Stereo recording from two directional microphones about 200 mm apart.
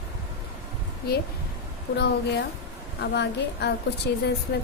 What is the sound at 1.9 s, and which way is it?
A woman's voice, 55° left (ahead or behind).